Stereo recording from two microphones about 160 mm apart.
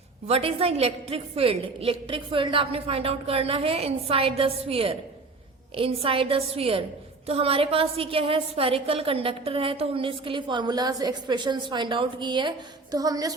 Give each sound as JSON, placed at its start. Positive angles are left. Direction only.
{"t": 0.3, "sound": "a woman's voice", "side_deg": -40}